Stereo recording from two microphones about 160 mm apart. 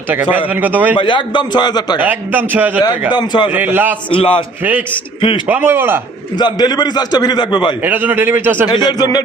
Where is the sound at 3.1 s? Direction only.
25° left (ahead or behind).